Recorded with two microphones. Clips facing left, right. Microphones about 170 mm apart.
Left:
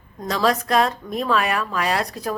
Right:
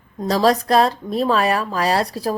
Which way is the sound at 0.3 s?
35° right (ahead or behind).